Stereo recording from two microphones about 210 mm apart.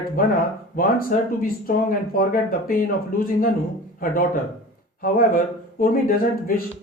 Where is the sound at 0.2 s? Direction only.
45° left (ahead or behind).